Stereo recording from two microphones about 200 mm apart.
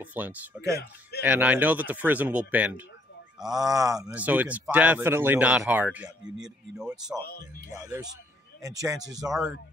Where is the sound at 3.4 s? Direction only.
20° right (ahead or behind); by 7.0 s centre (ahead or behind).